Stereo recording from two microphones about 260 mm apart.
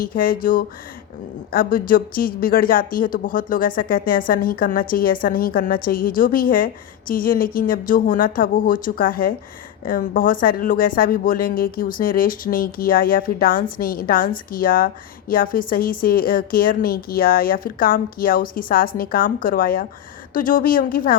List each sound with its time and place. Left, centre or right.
0.0 s speech: left